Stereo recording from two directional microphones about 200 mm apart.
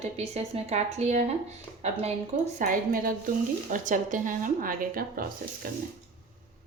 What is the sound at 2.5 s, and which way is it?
A woman's voice, 45° right (ahead or behind).